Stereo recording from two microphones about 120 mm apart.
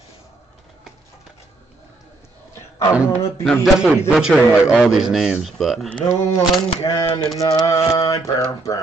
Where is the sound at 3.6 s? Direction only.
5° right (ahead or behind).